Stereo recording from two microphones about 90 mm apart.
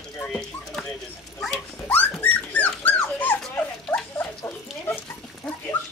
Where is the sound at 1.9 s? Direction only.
20° left (ahead or behind).